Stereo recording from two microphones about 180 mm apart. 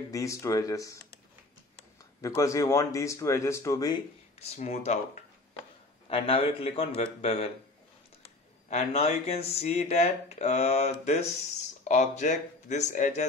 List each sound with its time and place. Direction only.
0.1 s speech: 15° left (ahead or behind)
2.2 s speech: 15° left (ahead or behind)
4.4 s speech: 35° left (ahead or behind)
8.6 s speech: 35° left (ahead or behind)